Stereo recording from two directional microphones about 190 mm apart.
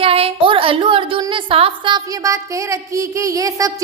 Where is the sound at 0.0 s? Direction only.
30° right (ahead or behind).